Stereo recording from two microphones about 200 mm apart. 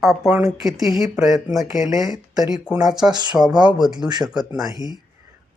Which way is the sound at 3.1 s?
20° right (ahead or behind).